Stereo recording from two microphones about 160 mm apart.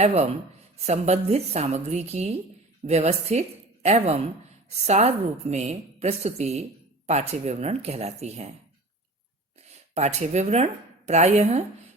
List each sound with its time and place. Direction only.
0.0 s a woman's voice: 45° right (ahead or behind)
9.9 s a woman's voice: 45° right (ahead or behind)